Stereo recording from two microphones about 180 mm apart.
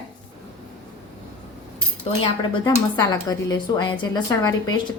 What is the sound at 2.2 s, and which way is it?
Speech, 25° left (ahead or behind).